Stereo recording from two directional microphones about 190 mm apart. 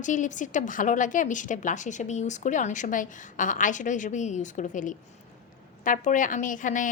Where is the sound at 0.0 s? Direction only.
40° left (ahead or behind).